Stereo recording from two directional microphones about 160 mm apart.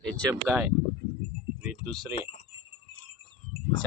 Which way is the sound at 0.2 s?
20° right (ahead or behind).